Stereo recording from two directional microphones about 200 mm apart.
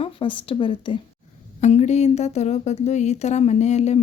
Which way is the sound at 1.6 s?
35° left (ahead or behind).